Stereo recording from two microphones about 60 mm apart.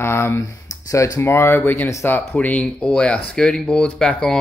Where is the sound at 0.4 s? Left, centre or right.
Left.